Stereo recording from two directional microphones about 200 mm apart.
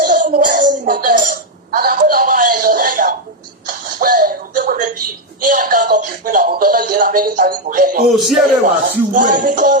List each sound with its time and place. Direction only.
0.0 s a sound: 40° right (ahead or behind)
5.5 s music: 45° right (ahead or behind)
8.1 s speech: centre (ahead or behind)
8.6 s speech: 40° right (ahead or behind)